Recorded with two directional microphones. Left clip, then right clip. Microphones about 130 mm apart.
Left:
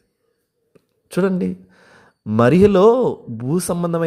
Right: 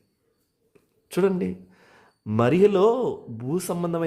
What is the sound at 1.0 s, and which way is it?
A woman's voice, 25° left (ahead or behind).